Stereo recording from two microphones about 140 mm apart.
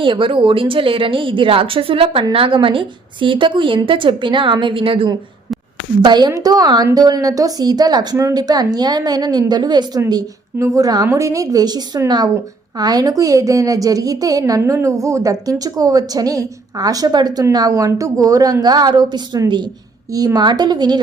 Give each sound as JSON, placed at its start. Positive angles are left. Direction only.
{"t": 0.0, "sound": "a woman's voice", "side_deg": -35}